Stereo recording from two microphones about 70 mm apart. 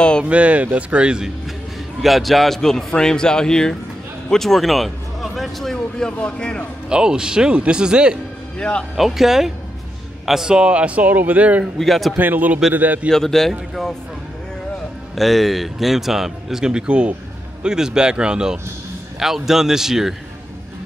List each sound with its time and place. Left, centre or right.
0.2 s a man's voice: centre
2.0 s a man's voice: centre
6.9 s speech: centre
8.5 s a man's voice: centre
8.9 s a man's voice: centre; by 11.6 s right
11.6 s speech: centre
12.2 s a man's voice: right
13.1 s speech: centre
15.1 s speech: centre